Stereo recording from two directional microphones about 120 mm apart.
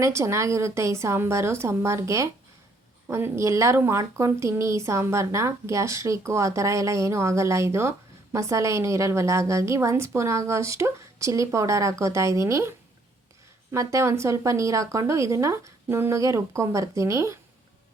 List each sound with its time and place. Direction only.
0.0 s a woman's voice: 25° right (ahead or behind)
13.7 s a woman's voice: 25° right (ahead or behind)